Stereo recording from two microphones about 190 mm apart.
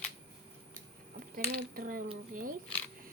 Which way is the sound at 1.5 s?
50° right (ahead or behind).